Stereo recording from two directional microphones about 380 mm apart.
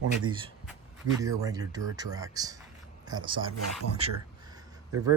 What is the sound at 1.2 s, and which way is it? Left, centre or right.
Speech, centre.